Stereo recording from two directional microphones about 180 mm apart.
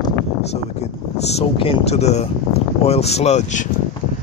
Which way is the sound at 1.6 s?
35° left (ahead or behind).